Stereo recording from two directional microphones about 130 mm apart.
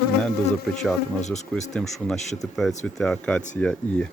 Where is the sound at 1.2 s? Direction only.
65° left (ahead or behind).